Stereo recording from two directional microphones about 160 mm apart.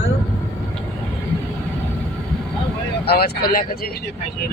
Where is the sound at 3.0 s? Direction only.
80° left.